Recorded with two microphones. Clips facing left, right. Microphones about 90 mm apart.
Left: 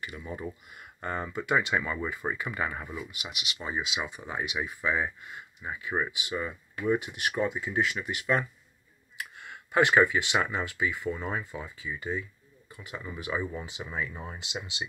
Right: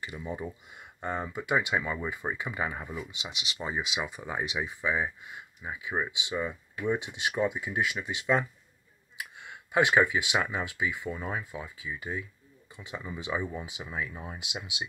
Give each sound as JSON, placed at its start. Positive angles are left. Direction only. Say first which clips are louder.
{"t": 0.0, "sound": "speech", "louder": "right 1 dB", "side_deg": -20}
{"t": 2.0, "sound": "speech", "louder": "left 1 dB", "side_deg": -15}
{"t": 3.1, "sound": "speech", "louder": "even", "side_deg": -25}
{"t": 4.8, "sound": "speech", "louder": "left 1 dB", "side_deg": -10}
{"t": 12.7, "sound": "speech", "louder": "right 1 dB", "side_deg": -20}
{"t": 14.4, "sound": "speech", "louder": "left 1 dB", "side_deg": -10}